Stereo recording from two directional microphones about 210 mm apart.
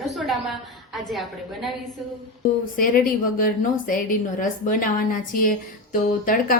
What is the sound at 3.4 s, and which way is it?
Speech, 40° left (ahead or behind).